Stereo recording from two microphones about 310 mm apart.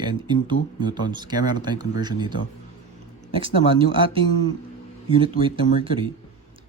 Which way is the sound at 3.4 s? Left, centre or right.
Centre.